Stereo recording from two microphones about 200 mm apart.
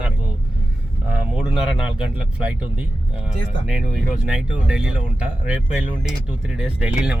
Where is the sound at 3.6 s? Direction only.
Centre (ahead or behind).